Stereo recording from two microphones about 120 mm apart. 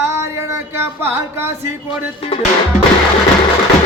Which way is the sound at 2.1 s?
50° left (ahead or behind).